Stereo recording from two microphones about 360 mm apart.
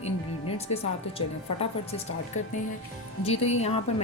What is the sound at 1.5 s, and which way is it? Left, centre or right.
Speech, centre.